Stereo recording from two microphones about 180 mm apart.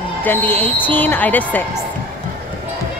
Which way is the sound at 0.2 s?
10° left (ahead or behind).